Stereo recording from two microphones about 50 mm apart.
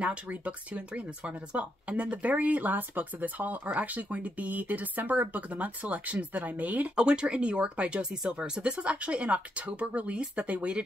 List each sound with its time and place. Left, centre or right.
0.0 s speech: right
7.0 s speech: centre